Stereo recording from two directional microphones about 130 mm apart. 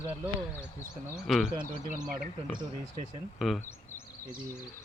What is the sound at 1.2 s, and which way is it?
Speech, centre (ahead or behind).